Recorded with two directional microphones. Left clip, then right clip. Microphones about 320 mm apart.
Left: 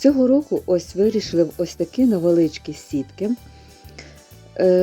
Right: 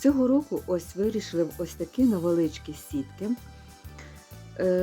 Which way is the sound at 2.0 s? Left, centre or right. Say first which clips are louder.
Left 7 dB; centre.